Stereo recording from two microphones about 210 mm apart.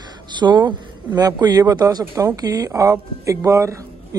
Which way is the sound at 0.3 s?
20° right (ahead or behind).